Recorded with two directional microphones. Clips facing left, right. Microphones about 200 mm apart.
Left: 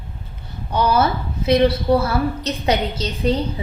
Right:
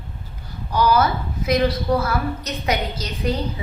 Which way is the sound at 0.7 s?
25° left (ahead or behind).